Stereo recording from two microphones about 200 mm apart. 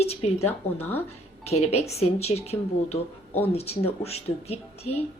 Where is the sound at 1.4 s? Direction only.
30° left (ahead or behind).